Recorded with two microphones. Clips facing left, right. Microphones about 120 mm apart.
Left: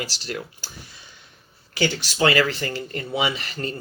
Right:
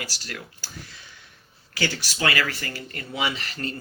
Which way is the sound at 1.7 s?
20° left (ahead or behind).